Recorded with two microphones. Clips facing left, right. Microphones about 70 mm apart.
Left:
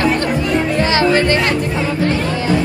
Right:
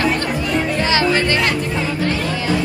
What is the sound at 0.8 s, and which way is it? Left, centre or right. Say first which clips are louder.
Music: left 3 dB; left.